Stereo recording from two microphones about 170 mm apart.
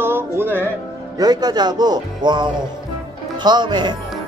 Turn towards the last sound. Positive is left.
turn(degrees=-25)  # may be behind; listen again after turning